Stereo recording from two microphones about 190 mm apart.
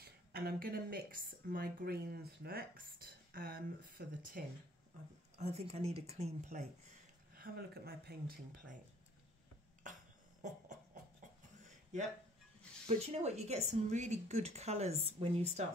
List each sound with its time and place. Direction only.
0.0 s speech: 55° right (ahead or behind)
5.4 s a woman's voice: 35° right (ahead or behind)
7.3 s speech: 50° right (ahead or behind)
9.8 s burping: 40° right (ahead or behind)
10.4 s a sound: 40° right (ahead or behind)
12.8 s a woman's voice: 35° right (ahead or behind)